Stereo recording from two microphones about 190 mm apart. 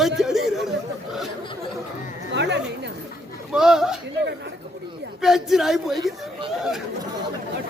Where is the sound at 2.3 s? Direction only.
65° right (ahead or behind).